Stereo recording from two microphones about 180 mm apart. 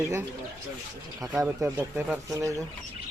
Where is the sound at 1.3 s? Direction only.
5° right (ahead or behind).